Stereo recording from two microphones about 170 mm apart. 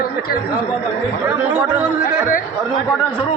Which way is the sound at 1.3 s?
10° right (ahead or behind).